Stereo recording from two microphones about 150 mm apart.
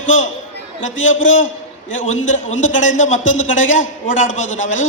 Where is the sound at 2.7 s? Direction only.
55° left (ahead or behind).